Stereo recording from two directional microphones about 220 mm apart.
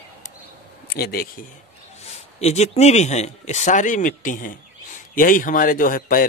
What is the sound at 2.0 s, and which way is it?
Speech, 30° left (ahead or behind).